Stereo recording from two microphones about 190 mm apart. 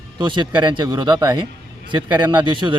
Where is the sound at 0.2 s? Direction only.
25° right (ahead or behind).